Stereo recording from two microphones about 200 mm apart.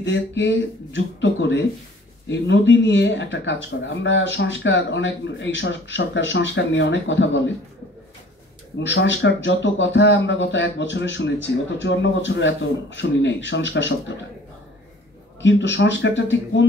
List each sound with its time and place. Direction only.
0.0 s speech: 65° left (ahead or behind)
8.7 s speech: 65° left (ahead or behind)
15.4 s speech: 65° left (ahead or behind)